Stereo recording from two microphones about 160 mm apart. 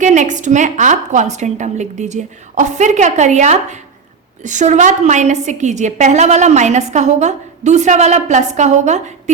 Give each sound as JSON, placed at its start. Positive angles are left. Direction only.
{"t": 0.0, "sound": "a woman's voice", "side_deg": -50}